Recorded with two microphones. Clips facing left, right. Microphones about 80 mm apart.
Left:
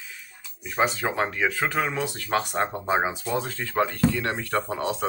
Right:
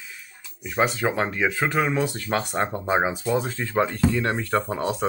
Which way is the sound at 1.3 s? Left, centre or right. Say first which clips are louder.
Right 2 dB; centre.